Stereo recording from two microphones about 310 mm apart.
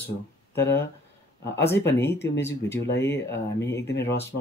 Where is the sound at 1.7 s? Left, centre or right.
Centre.